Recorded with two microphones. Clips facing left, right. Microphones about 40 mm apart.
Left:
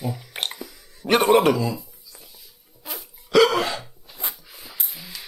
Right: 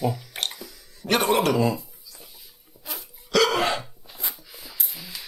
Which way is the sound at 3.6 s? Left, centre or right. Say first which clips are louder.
Right 2 dB; centre.